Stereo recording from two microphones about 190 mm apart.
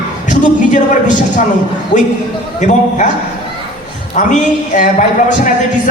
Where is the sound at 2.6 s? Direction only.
40° left (ahead or behind).